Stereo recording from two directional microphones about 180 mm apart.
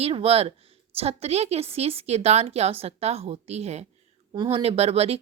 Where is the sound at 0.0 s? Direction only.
30° right (ahead or behind).